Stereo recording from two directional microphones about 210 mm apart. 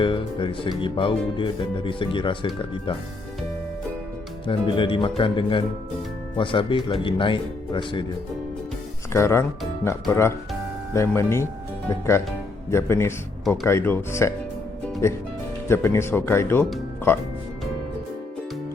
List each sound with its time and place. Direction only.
0.0 s speech: 25° left (ahead or behind)
4.4 s speech: 25° left (ahead or behind)
9.1 s speech: 15° left (ahead or behind)